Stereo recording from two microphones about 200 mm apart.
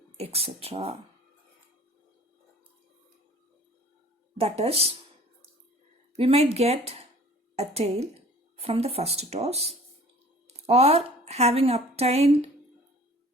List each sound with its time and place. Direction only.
0.2 s speech: 30° right (ahead or behind)
4.4 s speech: 30° right (ahead or behind)
6.1 s a woman's voice: 30° right (ahead or behind)